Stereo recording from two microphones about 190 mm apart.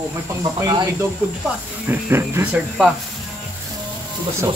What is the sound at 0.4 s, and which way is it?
Speech, 15° right (ahead or behind).